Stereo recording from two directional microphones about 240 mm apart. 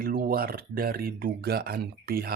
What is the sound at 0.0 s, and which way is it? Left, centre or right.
Speech, right.